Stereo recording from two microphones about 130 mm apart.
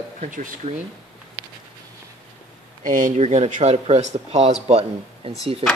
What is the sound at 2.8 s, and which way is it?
Speech, 90° right.